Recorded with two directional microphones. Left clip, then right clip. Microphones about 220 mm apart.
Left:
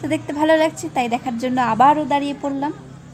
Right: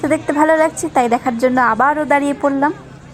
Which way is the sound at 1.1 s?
15° right (ahead or behind).